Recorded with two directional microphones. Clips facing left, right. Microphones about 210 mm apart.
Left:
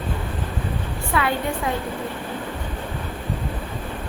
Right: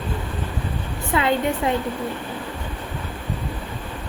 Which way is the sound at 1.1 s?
20° right (ahead or behind).